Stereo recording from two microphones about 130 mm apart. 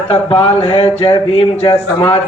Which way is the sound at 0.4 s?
50° left (ahead or behind).